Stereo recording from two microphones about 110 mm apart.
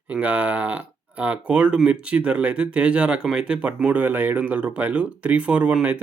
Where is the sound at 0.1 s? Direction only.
15° right (ahead or behind).